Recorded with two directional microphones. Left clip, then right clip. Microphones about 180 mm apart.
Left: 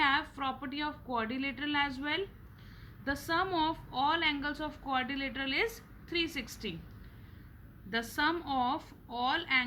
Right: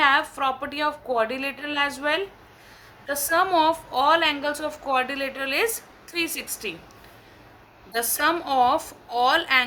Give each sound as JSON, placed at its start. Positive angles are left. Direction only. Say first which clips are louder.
{"t": 0.0, "sound": "a woman's voice", "louder": "right 10 dB", "side_deg": -35}
{"t": 7.9, "sound": "a woman's voice", "louder": "right 8 dB", "side_deg": -40}